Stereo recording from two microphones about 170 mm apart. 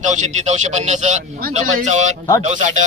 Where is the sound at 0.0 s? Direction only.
45° right (ahead or behind).